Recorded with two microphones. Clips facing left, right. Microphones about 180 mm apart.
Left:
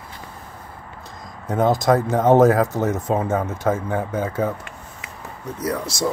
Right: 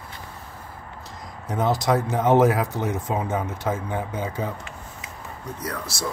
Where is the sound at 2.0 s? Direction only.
45° left (ahead or behind).